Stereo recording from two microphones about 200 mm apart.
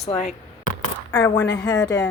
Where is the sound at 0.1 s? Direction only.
35° left (ahead or behind).